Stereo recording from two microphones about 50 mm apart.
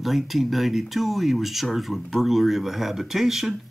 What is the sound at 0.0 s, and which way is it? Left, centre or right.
Speech, centre.